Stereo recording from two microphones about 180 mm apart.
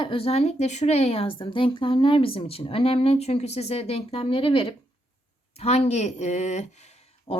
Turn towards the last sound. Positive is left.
turn(degrees=35)  # may be behind; listen again after turning